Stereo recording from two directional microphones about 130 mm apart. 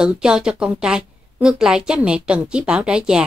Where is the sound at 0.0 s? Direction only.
5° right (ahead or behind).